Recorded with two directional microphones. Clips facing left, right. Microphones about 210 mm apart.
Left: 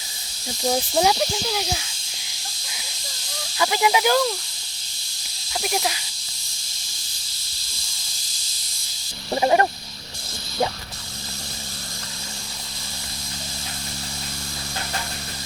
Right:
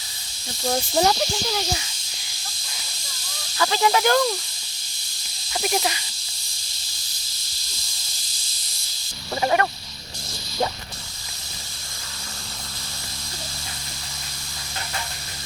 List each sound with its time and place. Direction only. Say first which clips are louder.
0.7 s speech: even; 5° left (ahead or behind)
3.6 s speech: even; 10° left (ahead or behind)
5.5 s speech: right 1 dB; centre (ahead or behind)
9.3 s a sound: left 3 dB; 25° left (ahead or behind)